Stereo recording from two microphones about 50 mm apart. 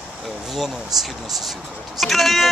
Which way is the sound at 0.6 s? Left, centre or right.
Centre.